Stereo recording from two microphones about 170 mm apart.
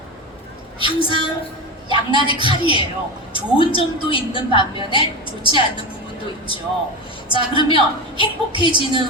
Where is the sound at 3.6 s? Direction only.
30° left (ahead or behind).